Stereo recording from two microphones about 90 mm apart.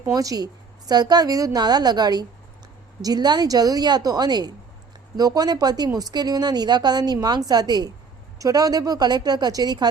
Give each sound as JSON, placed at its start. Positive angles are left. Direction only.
{"t": 0.1, "sound": "a woman's voice", "side_deg": -40}